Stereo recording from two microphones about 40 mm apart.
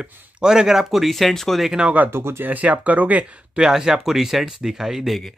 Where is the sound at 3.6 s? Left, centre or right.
Centre.